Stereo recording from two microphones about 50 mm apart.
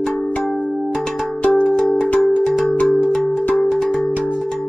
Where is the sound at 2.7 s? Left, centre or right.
Left.